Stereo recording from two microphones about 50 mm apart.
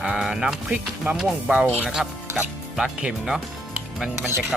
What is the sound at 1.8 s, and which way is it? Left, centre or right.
Speech, centre.